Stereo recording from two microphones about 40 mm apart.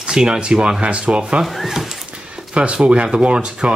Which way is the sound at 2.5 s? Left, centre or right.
Right.